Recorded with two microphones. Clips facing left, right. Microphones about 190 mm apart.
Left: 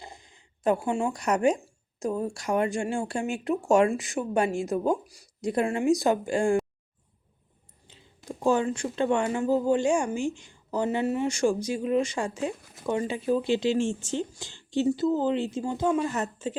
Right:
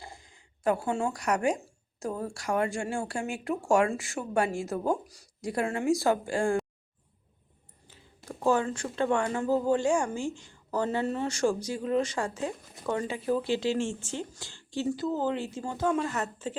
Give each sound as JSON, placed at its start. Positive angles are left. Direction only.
{"t": 0.0, "sound": "zipper", "side_deg": 20}
{"t": 2.0, "sound": "speech", "side_deg": 15}
{"t": 7.9, "sound": "speech", "side_deg": 15}